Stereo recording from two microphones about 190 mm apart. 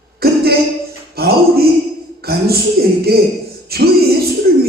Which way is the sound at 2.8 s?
55° right (ahead or behind).